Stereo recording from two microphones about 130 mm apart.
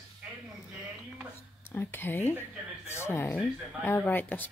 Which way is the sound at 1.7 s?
15° left (ahead or behind).